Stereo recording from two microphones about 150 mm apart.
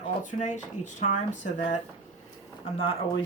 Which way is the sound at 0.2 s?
55° left (ahead or behind).